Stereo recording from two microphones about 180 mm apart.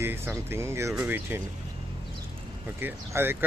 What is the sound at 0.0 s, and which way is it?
Speech, 10° right (ahead or behind).